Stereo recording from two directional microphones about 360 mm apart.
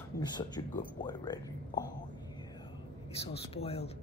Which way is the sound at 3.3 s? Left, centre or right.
Centre.